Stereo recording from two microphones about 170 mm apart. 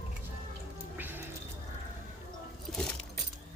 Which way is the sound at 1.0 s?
10° right (ahead or behind).